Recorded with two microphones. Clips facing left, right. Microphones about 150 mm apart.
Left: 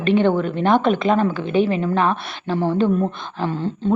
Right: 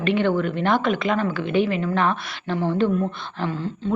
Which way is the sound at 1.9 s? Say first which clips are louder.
Left 3 dB; 15° left (ahead or behind).